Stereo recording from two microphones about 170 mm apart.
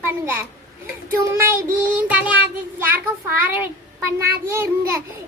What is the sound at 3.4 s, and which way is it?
Child singing, 10° right (ahead or behind).